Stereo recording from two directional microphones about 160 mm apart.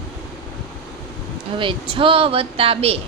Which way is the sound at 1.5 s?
35° right (ahead or behind).